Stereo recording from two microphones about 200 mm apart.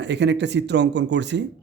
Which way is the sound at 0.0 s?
60° right (ahead or behind).